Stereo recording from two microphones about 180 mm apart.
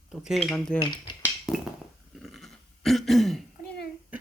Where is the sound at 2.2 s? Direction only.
Centre (ahead or behind).